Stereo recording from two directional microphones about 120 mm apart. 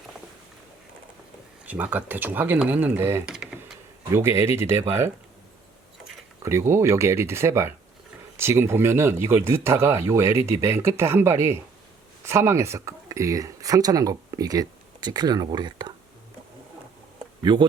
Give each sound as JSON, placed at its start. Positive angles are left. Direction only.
{"t": 1.6, "sound": "speech", "side_deg": -15}
{"t": 3.2, "sound": "typing", "side_deg": -5}
{"t": 4.1, "sound": "speech", "side_deg": -20}
{"t": 6.4, "sound": "speech", "side_deg": -25}
{"t": 17.4, "sound": "speech", "side_deg": -40}